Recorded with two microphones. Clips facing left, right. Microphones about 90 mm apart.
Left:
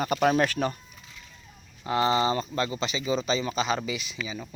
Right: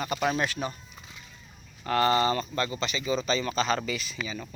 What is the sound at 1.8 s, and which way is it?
Speech, 15° left (ahead or behind).